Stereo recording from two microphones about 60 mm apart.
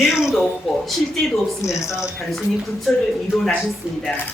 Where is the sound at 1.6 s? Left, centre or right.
Left.